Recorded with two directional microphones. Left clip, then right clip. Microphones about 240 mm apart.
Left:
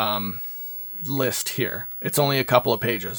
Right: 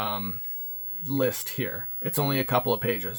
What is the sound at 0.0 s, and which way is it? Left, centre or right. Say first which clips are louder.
Speech: left 6 dB; left.